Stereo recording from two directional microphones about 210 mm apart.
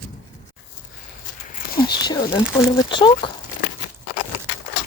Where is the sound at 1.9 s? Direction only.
20° left (ahead or behind).